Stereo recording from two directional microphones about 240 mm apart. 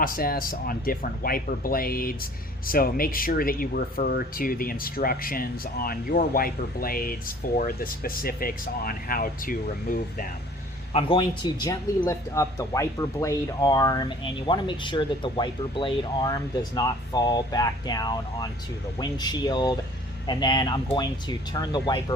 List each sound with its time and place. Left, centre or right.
0.0 s speech: left
10.9 s speech: centre